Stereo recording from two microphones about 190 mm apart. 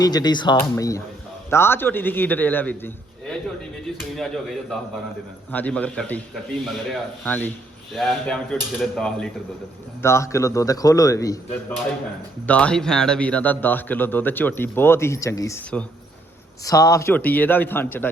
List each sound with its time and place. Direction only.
0.0 s a man's voice: 20° left (ahead or behind); by 9.3 s 5° left (ahead or behind)
10.0 s a man's voice: 15° left (ahead or behind)
12.5 s a man's voice: 5° left (ahead or behind)